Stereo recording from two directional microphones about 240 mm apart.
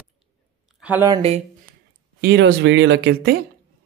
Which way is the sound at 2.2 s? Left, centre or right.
Right.